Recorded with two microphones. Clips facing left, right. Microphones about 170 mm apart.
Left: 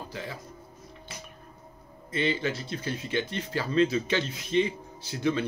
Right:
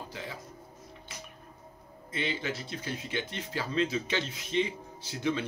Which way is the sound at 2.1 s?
15° right (ahead or behind).